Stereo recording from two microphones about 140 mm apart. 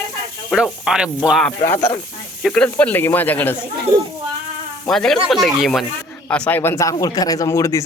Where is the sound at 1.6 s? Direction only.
15° left (ahead or behind).